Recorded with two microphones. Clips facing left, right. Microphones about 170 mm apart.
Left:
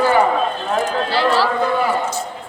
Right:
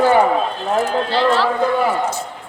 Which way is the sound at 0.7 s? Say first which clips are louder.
Right 3 dB; centre (ahead or behind).